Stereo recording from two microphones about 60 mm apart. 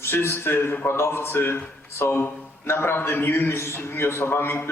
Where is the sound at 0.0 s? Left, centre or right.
Left.